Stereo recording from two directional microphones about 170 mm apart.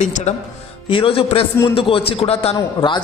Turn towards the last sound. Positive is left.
turn(degrees=30)  # may be behind; listen again after turning